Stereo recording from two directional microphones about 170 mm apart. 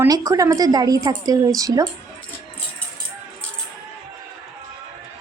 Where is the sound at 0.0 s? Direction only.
20° right (ahead or behind).